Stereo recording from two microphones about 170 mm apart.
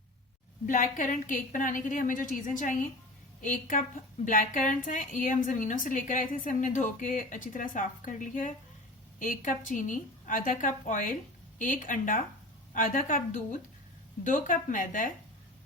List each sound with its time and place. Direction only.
0.7 s a woman's voice: 50° left (ahead or behind)